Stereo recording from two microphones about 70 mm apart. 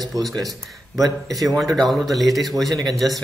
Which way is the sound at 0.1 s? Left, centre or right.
Right.